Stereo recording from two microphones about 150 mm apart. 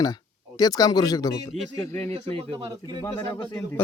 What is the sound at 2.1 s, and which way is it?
Speech, 40° right (ahead or behind).